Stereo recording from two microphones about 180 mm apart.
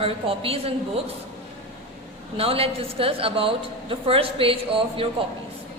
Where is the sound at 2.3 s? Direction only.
30° right (ahead or behind).